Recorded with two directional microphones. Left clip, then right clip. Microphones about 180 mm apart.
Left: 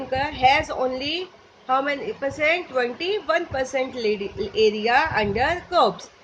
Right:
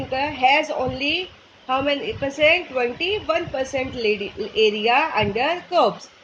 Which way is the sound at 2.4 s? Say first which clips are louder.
Right 4 dB; 20° right (ahead or behind).